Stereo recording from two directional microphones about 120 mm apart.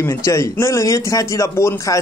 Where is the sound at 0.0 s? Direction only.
25° left (ahead or behind).